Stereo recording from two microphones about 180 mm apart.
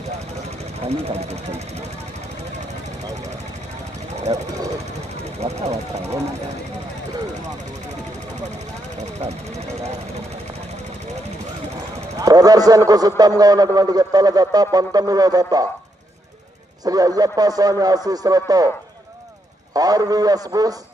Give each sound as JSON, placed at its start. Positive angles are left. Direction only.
{"t": 0.9, "sound": "speech", "side_deg": -35}
{"t": 5.2, "sound": "speech", "side_deg": -35}
{"t": 9.0, "sound": "speech", "side_deg": -35}
{"t": 12.2, "sound": "a man's voice", "side_deg": -20}
{"t": 16.8, "sound": "a man's voice", "side_deg": -20}
{"t": 19.7, "sound": "a man's voice", "side_deg": -20}